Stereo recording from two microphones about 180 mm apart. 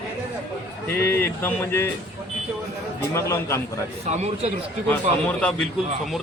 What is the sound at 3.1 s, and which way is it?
Speech, 15° left (ahead or behind).